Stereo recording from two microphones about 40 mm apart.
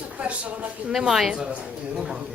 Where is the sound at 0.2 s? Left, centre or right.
Right.